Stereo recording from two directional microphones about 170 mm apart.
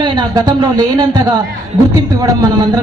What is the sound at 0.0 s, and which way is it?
A woman's voice, 25° right (ahead or behind).